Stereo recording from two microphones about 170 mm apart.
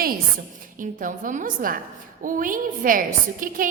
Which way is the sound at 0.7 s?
50° right (ahead or behind).